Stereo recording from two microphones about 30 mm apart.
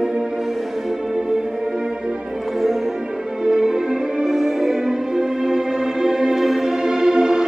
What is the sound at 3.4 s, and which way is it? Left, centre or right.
Music, centre.